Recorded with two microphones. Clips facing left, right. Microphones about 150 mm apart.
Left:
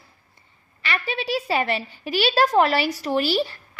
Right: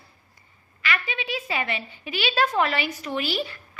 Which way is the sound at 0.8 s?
35° left (ahead or behind).